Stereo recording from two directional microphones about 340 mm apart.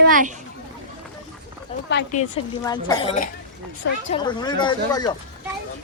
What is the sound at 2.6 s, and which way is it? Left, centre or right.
Speech, centre.